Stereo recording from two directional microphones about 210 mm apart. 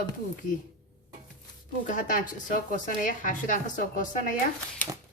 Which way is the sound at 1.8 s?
40° left (ahead or behind).